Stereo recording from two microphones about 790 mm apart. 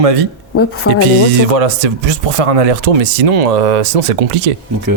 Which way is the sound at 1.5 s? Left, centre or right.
Right.